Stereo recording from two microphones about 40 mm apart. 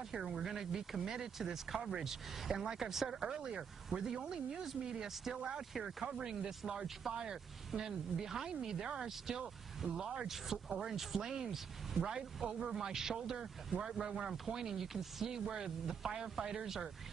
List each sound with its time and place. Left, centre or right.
0.1 s speech: centre
6.0 s speech: centre